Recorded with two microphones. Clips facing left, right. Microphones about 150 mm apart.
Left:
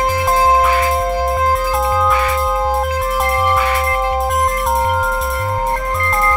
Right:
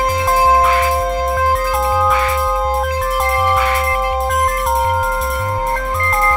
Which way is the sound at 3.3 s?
20° right (ahead or behind).